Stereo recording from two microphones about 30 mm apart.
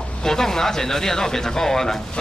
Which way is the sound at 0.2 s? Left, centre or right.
Centre.